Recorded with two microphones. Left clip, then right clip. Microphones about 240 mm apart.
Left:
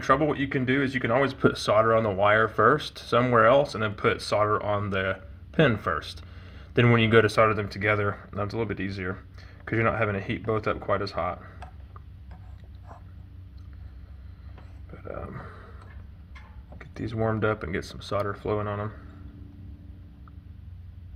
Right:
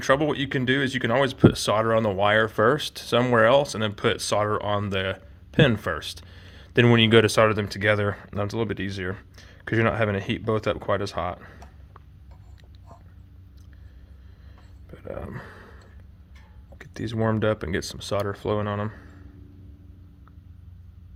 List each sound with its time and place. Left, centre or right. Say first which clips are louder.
0.0 s speech: right 1 dB; right
14.8 s a sound: right 2 dB; right
16.7 s speech: right 2 dB; right